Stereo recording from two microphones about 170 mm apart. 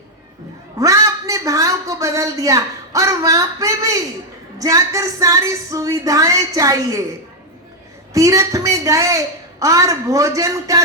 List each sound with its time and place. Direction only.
0.8 s a woman's voice: 20° right (ahead or behind)
8.1 s a man's voice: 20° right (ahead or behind)